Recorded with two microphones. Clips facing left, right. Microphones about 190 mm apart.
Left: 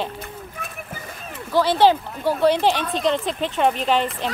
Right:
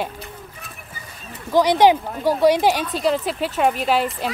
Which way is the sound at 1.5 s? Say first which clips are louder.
Right 2 dB; 15° right (ahead or behind).